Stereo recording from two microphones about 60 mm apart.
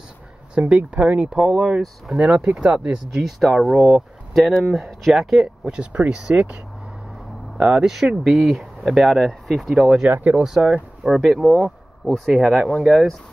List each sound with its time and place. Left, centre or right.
0.6 s speech: right
1.4 s speech: centre
2.1 s speech: centre
3.3 s speech: centre
5.8 s speech: centre